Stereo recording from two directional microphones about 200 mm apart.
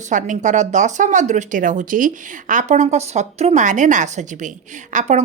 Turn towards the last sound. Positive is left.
turn(degrees=-35)  # may be behind; listen again after turning